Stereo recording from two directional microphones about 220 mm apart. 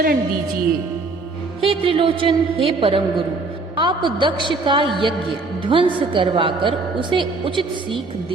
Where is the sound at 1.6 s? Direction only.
25° right (ahead or behind).